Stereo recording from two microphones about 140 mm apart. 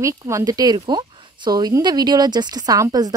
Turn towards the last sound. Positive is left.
turn(degrees=-25)  # may be behind; listen again after turning